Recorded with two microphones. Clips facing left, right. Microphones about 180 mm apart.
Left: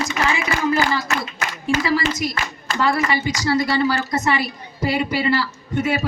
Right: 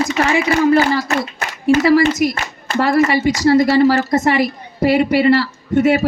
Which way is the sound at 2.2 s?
55° right (ahead or behind).